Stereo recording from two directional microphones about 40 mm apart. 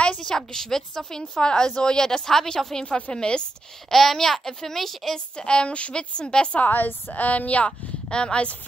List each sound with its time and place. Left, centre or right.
0.2 s a woman's voice: centre
3.9 s a child's voice: centre
5.3 s a woman's voice: left
6.6 s a woman's voice: left
7.2 s speech: left
8.1 s a woman's voice: left